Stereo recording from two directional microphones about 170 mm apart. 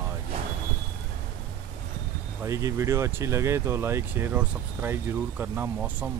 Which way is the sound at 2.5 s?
20° right (ahead or behind).